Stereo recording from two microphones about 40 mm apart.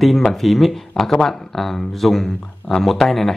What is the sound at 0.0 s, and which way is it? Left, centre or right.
Speech, centre.